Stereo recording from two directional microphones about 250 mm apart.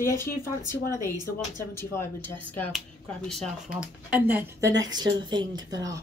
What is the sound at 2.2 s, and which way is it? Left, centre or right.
Speech, centre.